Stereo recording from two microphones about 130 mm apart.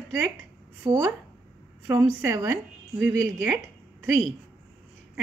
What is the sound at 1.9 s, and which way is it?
Speech, 15° right (ahead or behind).